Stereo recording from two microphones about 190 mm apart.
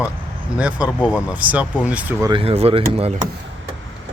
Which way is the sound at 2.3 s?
30° right (ahead or behind).